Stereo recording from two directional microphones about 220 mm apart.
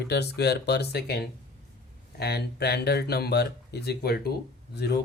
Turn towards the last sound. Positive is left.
turn(degrees=45)  # may be behind; listen again after turning